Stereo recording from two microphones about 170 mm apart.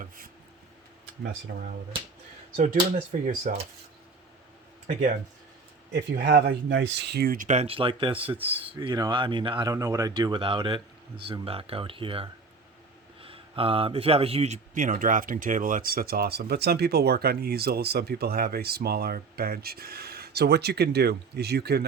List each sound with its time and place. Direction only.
1.5 s speech: 65° right (ahead or behind)
2.6 s speech: 50° right (ahead or behind)
5.9 s speech: 75° right (ahead or behind)